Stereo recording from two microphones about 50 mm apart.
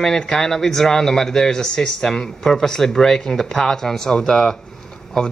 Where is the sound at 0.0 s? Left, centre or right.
Centre.